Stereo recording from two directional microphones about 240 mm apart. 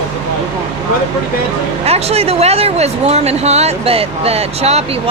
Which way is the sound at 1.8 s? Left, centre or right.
Right.